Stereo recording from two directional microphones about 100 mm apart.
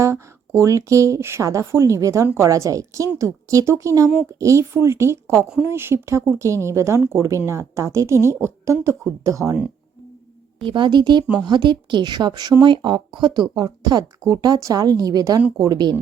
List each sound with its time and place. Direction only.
0.0 s a woman's voice: 30° right (ahead or behind)
2.5 s a woman's voice: 35° right (ahead or behind)
10.7 s a woman's voice: 55° right (ahead or behind)